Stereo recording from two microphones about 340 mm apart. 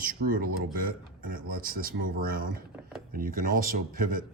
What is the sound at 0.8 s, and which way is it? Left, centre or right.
Speech, right.